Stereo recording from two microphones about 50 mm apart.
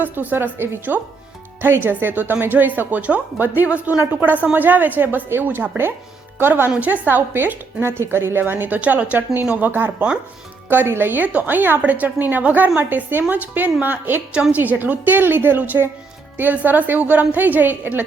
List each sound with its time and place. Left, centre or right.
0.0 s a woman's voice: right
8.8 s a woman's voice: right
9.6 s a woman's voice: right